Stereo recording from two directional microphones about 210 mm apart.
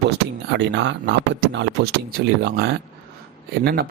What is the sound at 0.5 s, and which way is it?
Speech, 55° right (ahead or behind).